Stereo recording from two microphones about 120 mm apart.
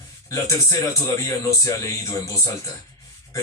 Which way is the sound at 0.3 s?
25° left (ahead or behind).